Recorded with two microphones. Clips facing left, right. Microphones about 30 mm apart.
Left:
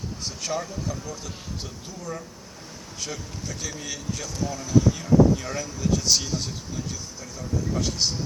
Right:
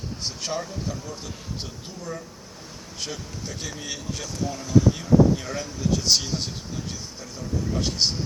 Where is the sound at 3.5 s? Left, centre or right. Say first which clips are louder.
Even; right.